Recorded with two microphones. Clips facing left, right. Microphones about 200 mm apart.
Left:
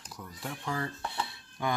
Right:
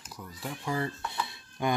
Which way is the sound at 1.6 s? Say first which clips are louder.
Right 3 dB; 20° right (ahead or behind).